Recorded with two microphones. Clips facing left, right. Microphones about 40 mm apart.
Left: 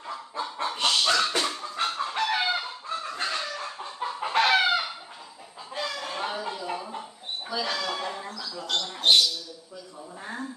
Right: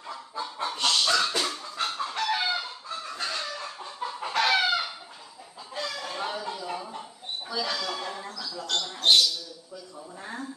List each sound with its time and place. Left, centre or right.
0.7 s chicken: centre
2.9 s fowl: left
3.3 s chicken: centre